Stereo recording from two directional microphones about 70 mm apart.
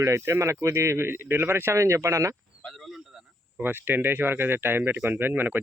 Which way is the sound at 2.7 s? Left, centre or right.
Centre.